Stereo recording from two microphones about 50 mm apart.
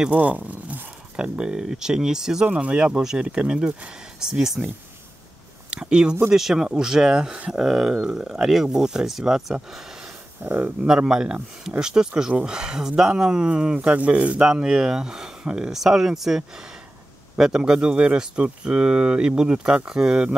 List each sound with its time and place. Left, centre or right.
0.1 s zipper: right
1.1 s speech: centre
3.0 s speech: centre
3.3 s speech: right
5.7 s speech: centre
7.6 s speech: centre
10.4 s speech: right
11.0 s speech: centre
14.4 s speech: centre